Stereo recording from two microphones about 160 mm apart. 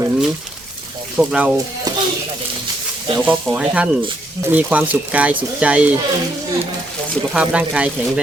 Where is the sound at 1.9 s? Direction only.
25° right (ahead or behind).